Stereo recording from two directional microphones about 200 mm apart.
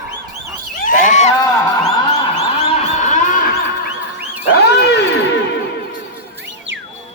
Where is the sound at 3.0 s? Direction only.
40° left (ahead or behind).